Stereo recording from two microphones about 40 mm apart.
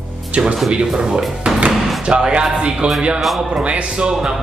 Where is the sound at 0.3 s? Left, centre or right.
Right.